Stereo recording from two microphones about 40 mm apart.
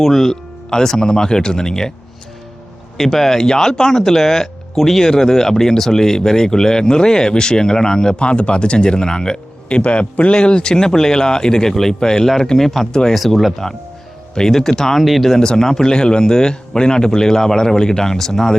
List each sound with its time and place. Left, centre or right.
0.0 s speech: centre
3.0 s speech: centre
12.5 s speech: centre
12.9 s speech: centre
13.1 s speech: centre
15.4 s speech: centre